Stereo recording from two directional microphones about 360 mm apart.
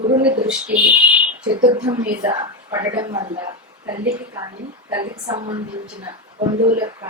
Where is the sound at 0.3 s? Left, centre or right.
Centre.